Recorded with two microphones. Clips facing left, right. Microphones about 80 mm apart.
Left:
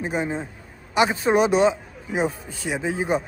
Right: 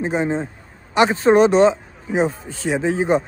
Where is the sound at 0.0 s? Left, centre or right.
Right.